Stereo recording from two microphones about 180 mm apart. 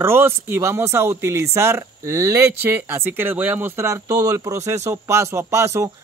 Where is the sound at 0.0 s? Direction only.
15° right (ahead or behind).